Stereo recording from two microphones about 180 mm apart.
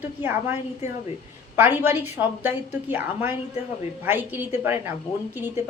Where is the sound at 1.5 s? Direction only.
10° right (ahead or behind).